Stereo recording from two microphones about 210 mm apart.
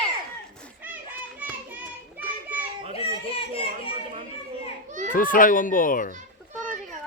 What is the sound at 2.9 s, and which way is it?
Children playing, 25° left (ahead or behind).